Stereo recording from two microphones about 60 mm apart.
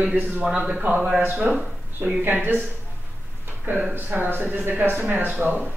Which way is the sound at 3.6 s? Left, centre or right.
Right.